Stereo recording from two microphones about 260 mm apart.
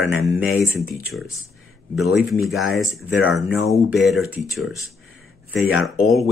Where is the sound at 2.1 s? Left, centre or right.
Centre.